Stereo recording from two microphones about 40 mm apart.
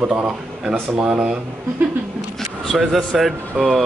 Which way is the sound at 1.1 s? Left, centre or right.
Right.